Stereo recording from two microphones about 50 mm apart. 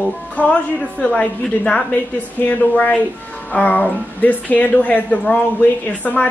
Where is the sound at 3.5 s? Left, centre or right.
Left.